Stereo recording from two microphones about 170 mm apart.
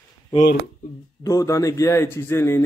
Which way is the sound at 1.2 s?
20° left (ahead or behind).